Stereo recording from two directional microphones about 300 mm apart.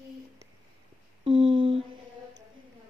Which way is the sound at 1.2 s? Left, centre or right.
Centre.